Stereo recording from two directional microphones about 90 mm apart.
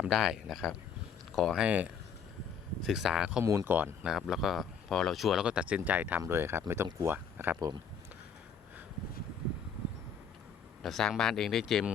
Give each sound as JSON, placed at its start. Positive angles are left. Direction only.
{"t": 0.1, "sound": "speech", "side_deg": -5}
{"t": 1.5, "sound": "speech", "side_deg": -15}
{"t": 2.8, "sound": "speech", "side_deg": -5}
{"t": 3.4, "sound": "speech", "side_deg": -35}
{"t": 3.7, "sound": "speech", "side_deg": -20}
{"t": 4.0, "sound": "speech", "side_deg": -5}
{"t": 10.8, "sound": "speech", "side_deg": 5}